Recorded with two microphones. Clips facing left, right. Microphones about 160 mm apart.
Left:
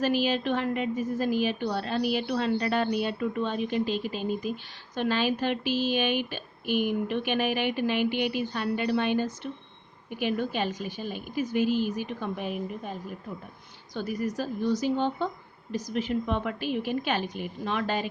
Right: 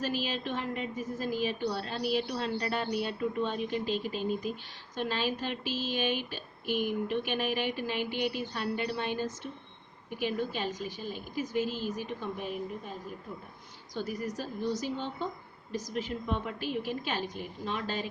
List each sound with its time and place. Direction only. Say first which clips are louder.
0.0 s a woman's voice: left 7 dB; 75° left (ahead or behind)
13.9 s a woman's voice: left 5 dB; 65° left (ahead or behind)